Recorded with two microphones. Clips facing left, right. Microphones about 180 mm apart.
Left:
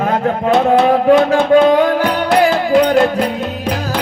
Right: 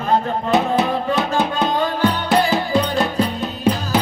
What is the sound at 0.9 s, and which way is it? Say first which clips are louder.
Music: left 9 dB; 60° left (ahead or behind).